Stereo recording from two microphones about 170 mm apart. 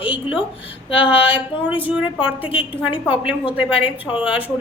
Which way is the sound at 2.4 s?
30° left (ahead or behind).